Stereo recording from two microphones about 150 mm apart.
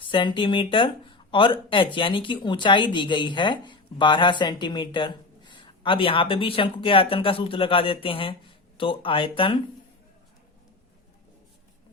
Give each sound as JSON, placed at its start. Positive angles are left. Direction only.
{"t": 0.1, "sound": "speech", "side_deg": 35}